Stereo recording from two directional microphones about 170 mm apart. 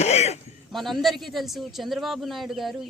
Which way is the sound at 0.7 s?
Centre (ahead or behind).